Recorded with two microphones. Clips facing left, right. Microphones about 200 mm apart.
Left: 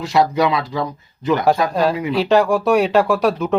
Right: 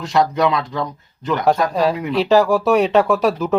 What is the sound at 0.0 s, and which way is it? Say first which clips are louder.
Speech: left 1 dB; 5° left (ahead or behind).